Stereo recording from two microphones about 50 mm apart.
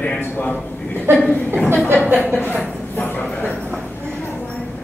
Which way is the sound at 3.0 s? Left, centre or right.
Left.